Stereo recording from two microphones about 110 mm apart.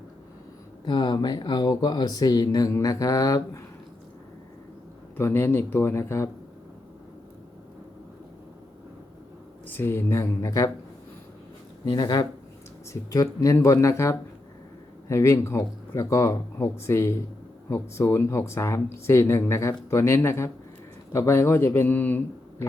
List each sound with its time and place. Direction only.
0.9 s speech: 45° left (ahead or behind)
5.1 s speech: 20° left (ahead or behind)
9.6 s speech: 20° left (ahead or behind)
11.9 s speech: 35° left (ahead or behind); by 22.6 s 15° left (ahead or behind)